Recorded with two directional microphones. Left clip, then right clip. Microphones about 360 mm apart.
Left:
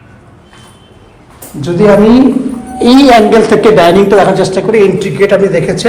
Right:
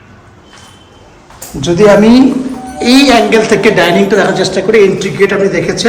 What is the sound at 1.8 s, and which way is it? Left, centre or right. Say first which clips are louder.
A woman's voice: even; centre.